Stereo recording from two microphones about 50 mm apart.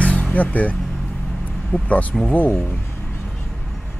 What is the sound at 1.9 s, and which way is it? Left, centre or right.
Speech, left.